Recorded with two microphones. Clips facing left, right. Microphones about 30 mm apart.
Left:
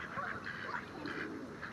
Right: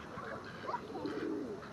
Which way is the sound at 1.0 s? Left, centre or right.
Left.